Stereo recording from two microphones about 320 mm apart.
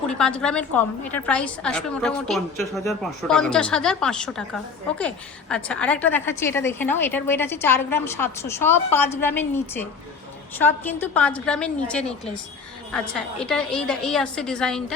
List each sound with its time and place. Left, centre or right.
0.1 s a woman's voice: centre